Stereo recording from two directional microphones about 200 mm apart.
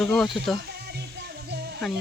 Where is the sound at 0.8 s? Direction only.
55° right (ahead or behind).